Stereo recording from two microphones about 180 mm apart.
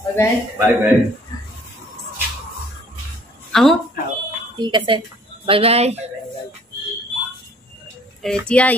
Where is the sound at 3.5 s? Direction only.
Centre (ahead or behind).